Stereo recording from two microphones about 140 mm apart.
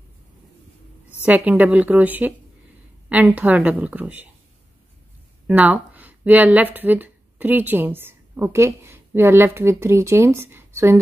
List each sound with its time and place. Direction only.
1.2 s speech: 10° right (ahead or behind)
5.5 s speech: 10° right (ahead or behind)